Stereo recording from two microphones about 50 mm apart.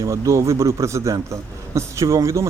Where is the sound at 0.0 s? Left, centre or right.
Right.